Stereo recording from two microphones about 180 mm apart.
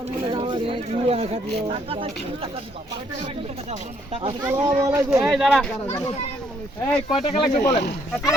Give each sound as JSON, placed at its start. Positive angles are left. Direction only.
{"t": 0.3, "sound": "speech", "side_deg": -25}
{"t": 3.7, "sound": "speech", "side_deg": -30}
{"t": 4.4, "sound": "speech", "side_deg": -15}
{"t": 5.2, "sound": "speech", "side_deg": 0}
{"t": 6.8, "sound": "speech", "side_deg": 25}
{"t": 7.5, "sound": "speech", "side_deg": 40}